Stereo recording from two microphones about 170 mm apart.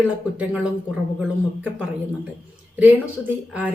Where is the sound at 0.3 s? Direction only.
5° right (ahead or behind).